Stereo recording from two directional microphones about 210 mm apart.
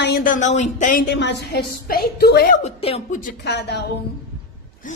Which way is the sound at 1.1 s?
50° left (ahead or behind).